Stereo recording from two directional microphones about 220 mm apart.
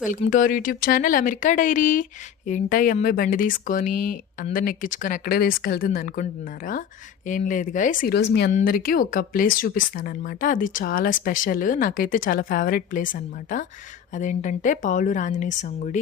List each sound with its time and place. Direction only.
0.0 s speech: 35° left (ahead or behind)
7.3 s speech: 35° left (ahead or behind)
8.5 s speech: 40° left (ahead or behind)